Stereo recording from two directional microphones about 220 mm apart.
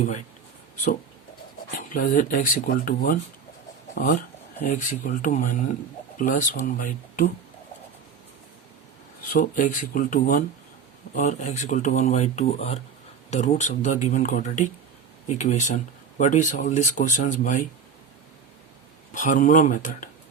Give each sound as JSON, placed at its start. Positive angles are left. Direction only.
{"t": 1.8, "sound": "speech", "side_deg": 40}
{"t": 4.6, "sound": "speech", "side_deg": 35}
{"t": 9.3, "sound": "speech", "side_deg": 35}
{"t": 19.1, "sound": "speech", "side_deg": 35}